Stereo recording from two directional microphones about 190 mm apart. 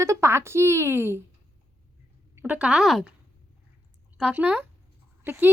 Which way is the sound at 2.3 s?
10° right (ahead or behind).